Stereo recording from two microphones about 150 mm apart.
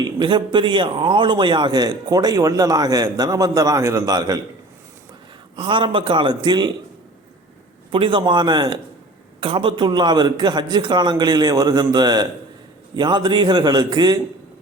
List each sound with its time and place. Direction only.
0.2 s a man's voice: 30° right (ahead or behind)
5.5 s a man's voice: 35° right (ahead or behind)
7.9 s a man's voice: 35° right (ahead or behind)